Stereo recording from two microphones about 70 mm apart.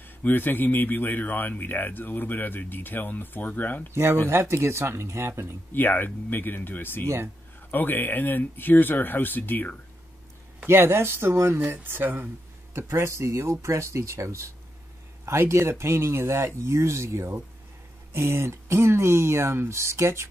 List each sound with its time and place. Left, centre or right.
0.0 s speech: left
3.9 s speech: right
5.7 s speech: left
10.7 s speech: right
12.8 s speech: right